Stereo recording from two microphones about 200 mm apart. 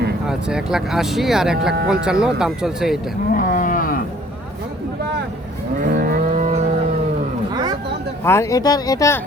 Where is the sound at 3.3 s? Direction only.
40° left (ahead or behind).